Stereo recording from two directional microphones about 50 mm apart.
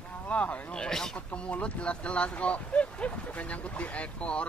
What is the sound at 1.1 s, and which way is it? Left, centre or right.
Speech, left.